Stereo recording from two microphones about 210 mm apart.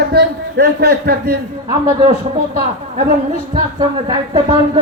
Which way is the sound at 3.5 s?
20° right (ahead or behind).